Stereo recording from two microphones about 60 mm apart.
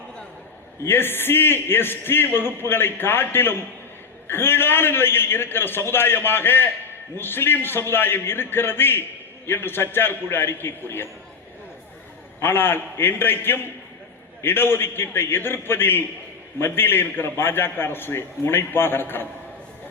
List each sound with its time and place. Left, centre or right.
0.9 s a man's voice: left
12.4 s a man's voice: left